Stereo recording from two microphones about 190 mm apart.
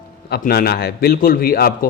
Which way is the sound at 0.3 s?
55° left (ahead or behind).